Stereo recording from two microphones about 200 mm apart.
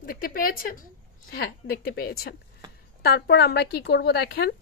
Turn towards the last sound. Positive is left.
turn(degrees=55)  # may be behind; listen again after turning